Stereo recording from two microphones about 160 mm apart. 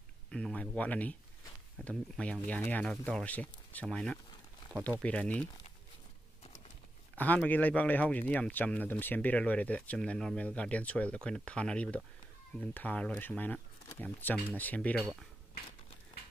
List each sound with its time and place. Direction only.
0.3 s a sound: 5° left (ahead or behind)
1.8 s speech: 5° left (ahead or behind)
7.2 s speech: 10° left (ahead or behind)